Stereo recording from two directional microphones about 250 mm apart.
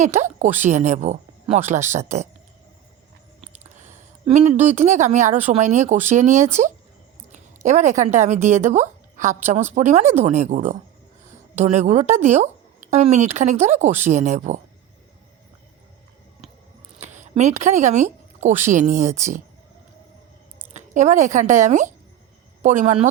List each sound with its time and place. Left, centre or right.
0.0 s speech: right
3.4 s a sound: right
4.7 s a woman's voice: right
17.0 s a sound: right
17.6 s speech: right
20.7 s a woman's voice: right